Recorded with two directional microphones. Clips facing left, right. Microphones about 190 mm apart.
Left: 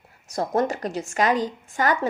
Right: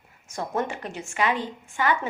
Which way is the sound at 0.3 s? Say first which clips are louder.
Left 5 dB; 35° left (ahead or behind).